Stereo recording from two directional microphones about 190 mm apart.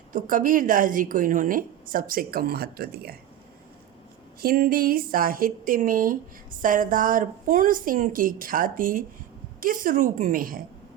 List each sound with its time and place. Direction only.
0.1 s a woman's voice: 45° right (ahead or behind)
4.4 s a woman's voice: 50° right (ahead or behind)